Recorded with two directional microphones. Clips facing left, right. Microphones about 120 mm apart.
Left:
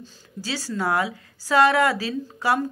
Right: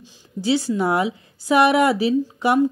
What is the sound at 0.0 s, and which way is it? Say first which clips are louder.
Speech: right 10 dB; 20° right (ahead or behind).